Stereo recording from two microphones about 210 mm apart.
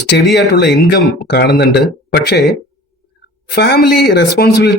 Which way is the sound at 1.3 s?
50° left (ahead or behind).